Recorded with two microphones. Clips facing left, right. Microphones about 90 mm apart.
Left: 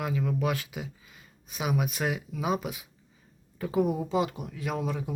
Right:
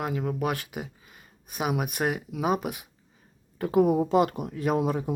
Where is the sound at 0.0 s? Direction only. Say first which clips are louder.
Right 1 dB; 40° right (ahead or behind).